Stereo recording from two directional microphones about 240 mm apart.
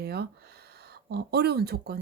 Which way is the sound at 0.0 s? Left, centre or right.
Right.